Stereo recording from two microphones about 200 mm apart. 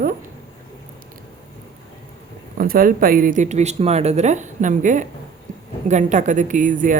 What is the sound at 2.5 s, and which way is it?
Speech, 45° right (ahead or behind).